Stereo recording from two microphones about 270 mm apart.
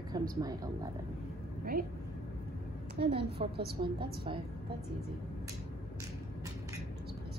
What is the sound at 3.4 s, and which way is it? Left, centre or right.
Speech, right.